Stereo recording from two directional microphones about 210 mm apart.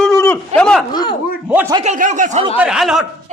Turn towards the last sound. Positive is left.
turn(degrees=0)  # may be behind; listen again after turning